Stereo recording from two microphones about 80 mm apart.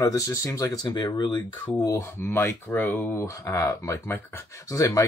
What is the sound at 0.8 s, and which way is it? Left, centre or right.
Speech, left.